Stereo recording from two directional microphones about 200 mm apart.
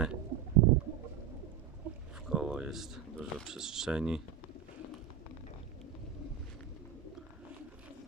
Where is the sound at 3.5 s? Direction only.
5° right (ahead or behind).